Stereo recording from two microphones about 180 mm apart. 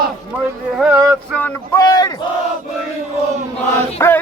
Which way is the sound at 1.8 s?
20° left (ahead or behind).